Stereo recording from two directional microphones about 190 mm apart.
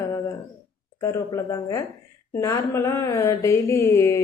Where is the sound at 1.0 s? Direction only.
15° left (ahead or behind).